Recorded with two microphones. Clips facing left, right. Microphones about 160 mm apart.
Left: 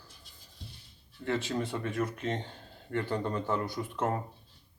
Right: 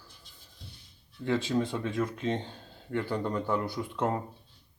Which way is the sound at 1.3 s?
15° right (ahead or behind).